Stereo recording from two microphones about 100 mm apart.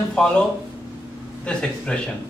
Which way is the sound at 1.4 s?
10° left (ahead or behind).